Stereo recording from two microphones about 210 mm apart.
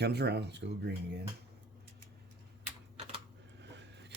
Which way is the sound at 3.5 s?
55° right (ahead or behind).